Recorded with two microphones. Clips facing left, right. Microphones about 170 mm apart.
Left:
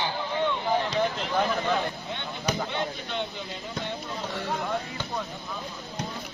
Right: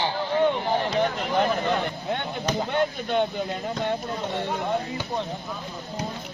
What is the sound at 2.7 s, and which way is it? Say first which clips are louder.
Speech: right 7 dB; 50° right (ahead or behind).